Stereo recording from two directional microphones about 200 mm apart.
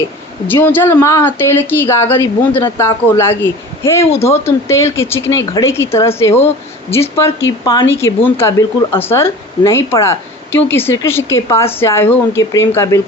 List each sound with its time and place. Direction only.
0.4 s a woman's voice: 10° left (ahead or behind)